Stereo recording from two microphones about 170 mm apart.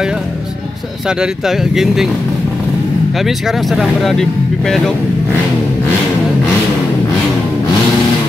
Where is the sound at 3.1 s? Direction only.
Centre (ahead or behind).